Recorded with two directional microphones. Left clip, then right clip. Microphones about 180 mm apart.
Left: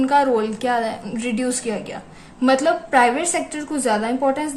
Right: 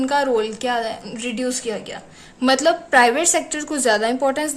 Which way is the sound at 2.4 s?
30° right (ahead or behind).